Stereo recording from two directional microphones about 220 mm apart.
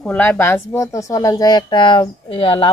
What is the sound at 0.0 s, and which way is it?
Speech, 5° left (ahead or behind).